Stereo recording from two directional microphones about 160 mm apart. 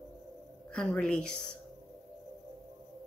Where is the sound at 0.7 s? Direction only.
5° left (ahead or behind).